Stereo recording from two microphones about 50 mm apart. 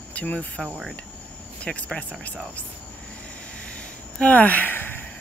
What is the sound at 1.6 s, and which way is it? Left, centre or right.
Speech, left.